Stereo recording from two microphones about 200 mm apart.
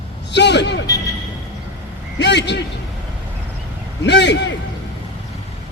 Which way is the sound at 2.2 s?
60° left (ahead or behind).